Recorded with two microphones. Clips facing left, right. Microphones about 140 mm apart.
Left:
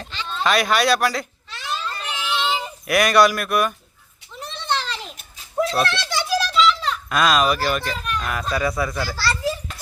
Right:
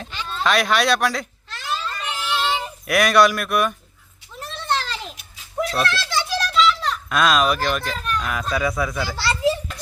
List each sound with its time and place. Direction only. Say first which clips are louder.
0.1 s a sound: even; 5° right (ahead or behind)
5.8 s a child's voice: even; 20° left (ahead or behind); by 9.0 s centre (ahead or behind)
9.1 s children playing: right 6 dB; 20° right (ahead or behind)